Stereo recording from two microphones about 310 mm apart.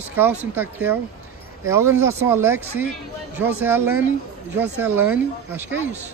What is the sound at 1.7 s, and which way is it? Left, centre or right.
Speech, centre.